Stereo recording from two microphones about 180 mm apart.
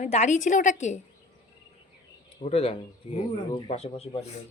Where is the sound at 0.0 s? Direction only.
40° left (ahead or behind).